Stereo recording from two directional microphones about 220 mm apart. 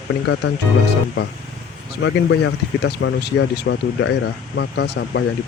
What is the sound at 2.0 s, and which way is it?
Speech, 55° left (ahead or behind).